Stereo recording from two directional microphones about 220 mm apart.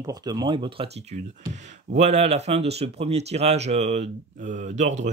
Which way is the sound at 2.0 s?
30° right (ahead or behind).